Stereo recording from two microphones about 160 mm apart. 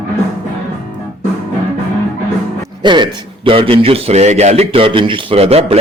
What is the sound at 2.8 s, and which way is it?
A man's voice, 30° right (ahead or behind).